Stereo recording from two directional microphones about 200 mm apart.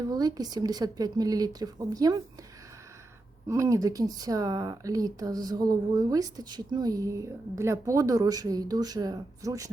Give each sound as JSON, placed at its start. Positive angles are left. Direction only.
{"t": 0.1, "sound": "speech", "side_deg": -20}
{"t": 3.5, "sound": "speech", "side_deg": -15}